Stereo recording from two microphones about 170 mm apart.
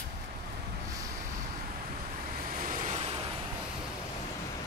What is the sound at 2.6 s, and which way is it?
Vehicle, 50° right (ahead or behind).